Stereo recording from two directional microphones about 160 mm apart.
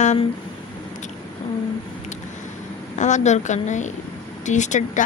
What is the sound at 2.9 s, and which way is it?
A woman's voice, 50° left (ahead or behind).